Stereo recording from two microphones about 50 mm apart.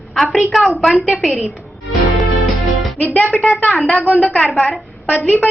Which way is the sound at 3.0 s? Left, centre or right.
Left.